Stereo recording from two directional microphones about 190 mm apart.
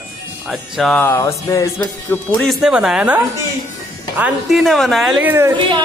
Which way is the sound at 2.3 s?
Centre (ahead or behind).